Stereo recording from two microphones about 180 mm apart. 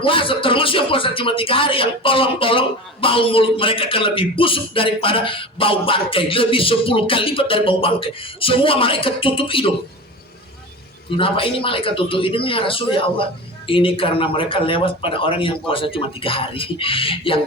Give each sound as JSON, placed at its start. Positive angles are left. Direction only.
{"t": 0.0, "sound": "speech", "side_deg": 30}
{"t": 11.2, "sound": "speech", "side_deg": 30}